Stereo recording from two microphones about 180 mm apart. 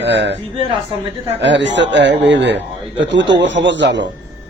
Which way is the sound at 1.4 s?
80° right.